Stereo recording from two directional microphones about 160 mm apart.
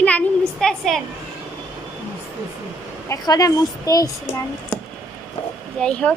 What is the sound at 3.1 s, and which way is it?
Speech, 20° left (ahead or behind).